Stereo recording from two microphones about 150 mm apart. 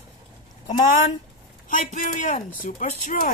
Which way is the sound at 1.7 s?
60° left (ahead or behind).